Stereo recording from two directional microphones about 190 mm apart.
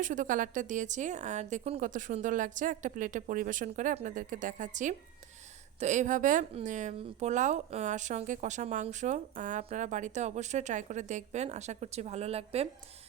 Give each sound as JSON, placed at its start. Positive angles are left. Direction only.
{"t": 0.0, "sound": "speech", "side_deg": -45}